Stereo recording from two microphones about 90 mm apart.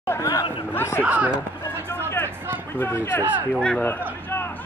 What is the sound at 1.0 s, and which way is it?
Speech, 15° right (ahead or behind).